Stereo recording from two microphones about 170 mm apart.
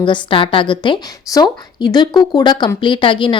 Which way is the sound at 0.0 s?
30° left (ahead or behind).